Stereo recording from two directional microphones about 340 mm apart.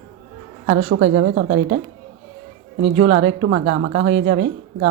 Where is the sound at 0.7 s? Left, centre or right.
Right.